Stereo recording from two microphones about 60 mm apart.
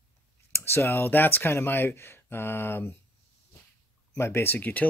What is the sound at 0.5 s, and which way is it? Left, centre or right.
Speech, left.